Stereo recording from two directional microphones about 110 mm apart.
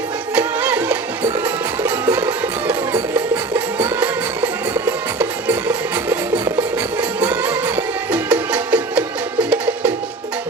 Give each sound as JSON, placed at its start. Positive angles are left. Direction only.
{"t": 0.3, "sound": "music", "side_deg": -15}
{"t": 7.2, "sound": "music", "side_deg": -20}